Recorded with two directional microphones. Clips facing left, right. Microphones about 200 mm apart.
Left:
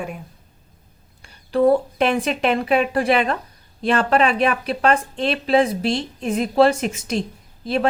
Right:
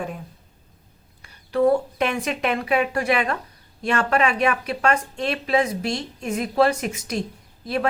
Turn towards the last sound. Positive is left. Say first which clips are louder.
# left 3 dB
turn(degrees=30)  # may be behind; listen again after turning